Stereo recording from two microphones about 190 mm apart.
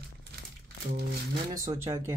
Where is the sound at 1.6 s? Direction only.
15° right (ahead or behind).